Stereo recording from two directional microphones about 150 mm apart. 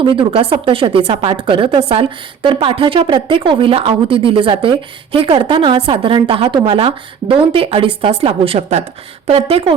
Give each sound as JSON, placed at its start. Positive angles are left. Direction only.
{"t": 0.0, "sound": "speech", "side_deg": -35}